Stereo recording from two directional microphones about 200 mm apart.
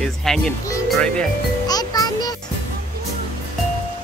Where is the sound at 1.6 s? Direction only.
20° left (ahead or behind).